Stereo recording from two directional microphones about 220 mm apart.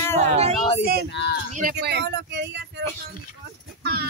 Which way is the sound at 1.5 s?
35° right (ahead or behind).